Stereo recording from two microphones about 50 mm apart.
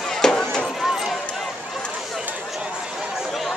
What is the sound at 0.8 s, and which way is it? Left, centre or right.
Run, centre.